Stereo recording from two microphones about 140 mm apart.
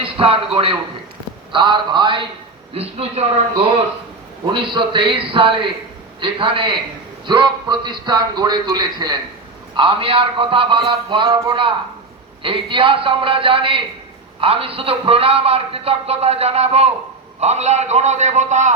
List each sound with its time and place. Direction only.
0.0 s a man's voice: 40° right (ahead or behind)
2.7 s a man's voice: 45° right (ahead or behind)
4.5 s a man's voice: 35° right (ahead or behind); by 18.7 s 55° right (ahead or behind)